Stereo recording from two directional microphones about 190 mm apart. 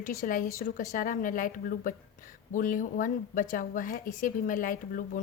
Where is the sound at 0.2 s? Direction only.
45° left (ahead or behind).